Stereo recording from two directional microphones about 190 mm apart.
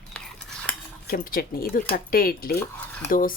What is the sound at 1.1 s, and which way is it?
Speech, 50° left (ahead or behind).